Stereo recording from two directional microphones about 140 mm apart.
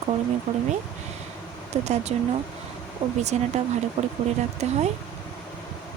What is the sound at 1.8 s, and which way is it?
Speech, 55° right (ahead or behind).